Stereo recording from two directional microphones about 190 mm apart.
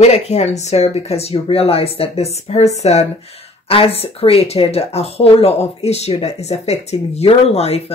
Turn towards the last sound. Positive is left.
turn(degrees=35)  # may be behind; listen again after turning